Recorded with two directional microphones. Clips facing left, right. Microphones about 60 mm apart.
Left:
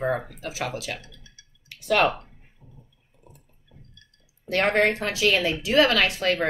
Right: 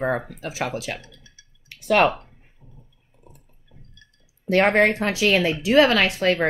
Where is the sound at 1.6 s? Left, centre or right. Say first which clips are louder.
Right 3 dB; right.